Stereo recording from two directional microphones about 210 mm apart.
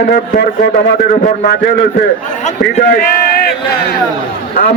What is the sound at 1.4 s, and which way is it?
A man's voice, 50° left (ahead or behind).